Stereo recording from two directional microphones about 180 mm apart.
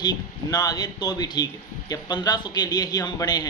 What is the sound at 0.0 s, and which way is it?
A man's voice, 20° left (ahead or behind).